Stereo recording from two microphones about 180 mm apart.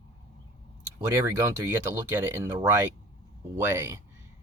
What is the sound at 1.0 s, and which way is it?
Speech, 15° right (ahead or behind).